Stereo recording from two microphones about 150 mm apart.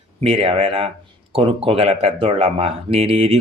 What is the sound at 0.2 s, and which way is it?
Speech, 40° right (ahead or behind).